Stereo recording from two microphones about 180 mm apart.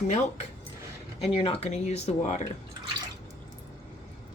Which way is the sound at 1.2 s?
30° left (ahead or behind).